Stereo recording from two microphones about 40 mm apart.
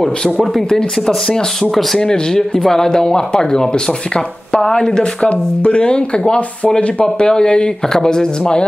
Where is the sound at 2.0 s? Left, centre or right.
Centre.